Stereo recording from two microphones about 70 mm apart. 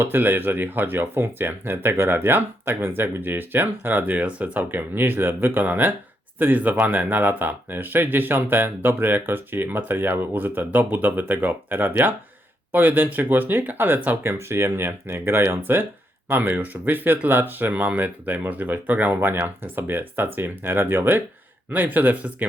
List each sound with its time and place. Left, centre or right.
0.0 s speech: right
14.3 s speech: right